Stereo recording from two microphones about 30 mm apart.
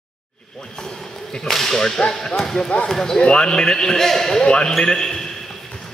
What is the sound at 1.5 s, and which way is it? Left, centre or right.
Speech, centre.